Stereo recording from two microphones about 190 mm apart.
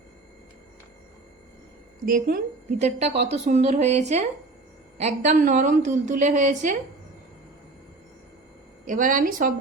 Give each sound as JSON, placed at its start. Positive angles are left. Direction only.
{"t": 2.0, "sound": "a woman's voice", "side_deg": -50}
{"t": 8.8, "sound": "a woman's voice", "side_deg": -45}